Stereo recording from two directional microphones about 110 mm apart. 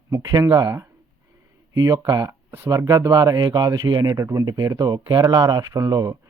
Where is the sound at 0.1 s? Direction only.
35° right (ahead or behind).